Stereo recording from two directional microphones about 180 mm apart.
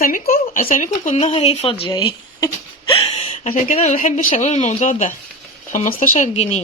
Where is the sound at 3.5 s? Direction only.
40° left (ahead or behind).